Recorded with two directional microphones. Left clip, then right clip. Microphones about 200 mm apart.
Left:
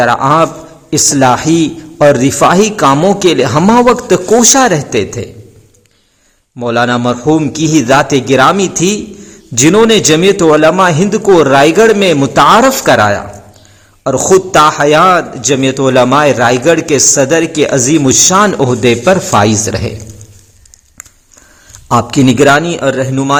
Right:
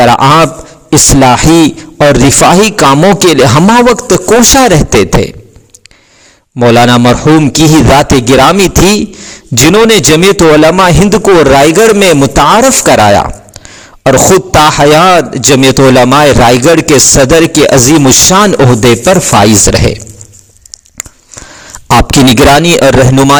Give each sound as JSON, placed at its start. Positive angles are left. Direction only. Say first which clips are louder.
{"t": 0.0, "sound": "a man's voice", "louder": "right 4 dB", "side_deg": -40}
{"t": 6.6, "sound": "a man's voice", "louder": "right 7 dB", "side_deg": -35}
{"t": 21.8, "sound": "a man's voice", "louder": "right 5 dB", "side_deg": -45}